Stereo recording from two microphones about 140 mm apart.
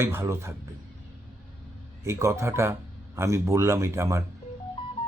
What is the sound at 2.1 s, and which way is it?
Speech, 20° right (ahead or behind).